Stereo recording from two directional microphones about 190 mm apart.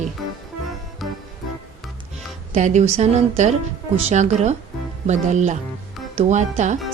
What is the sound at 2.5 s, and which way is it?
A woman's voice, 40° right (ahead or behind).